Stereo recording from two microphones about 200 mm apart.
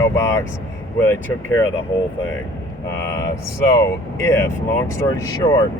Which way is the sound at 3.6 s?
15° left (ahead or behind).